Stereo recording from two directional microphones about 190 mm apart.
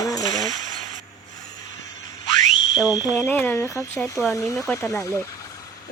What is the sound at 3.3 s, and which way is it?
Speech, 15° left (ahead or behind).